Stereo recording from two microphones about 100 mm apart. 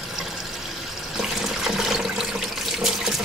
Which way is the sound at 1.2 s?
5° right (ahead or behind).